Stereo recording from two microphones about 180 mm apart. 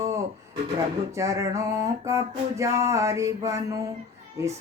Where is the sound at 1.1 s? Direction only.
15° right (ahead or behind).